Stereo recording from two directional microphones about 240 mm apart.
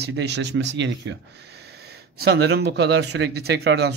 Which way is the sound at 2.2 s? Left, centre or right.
Right.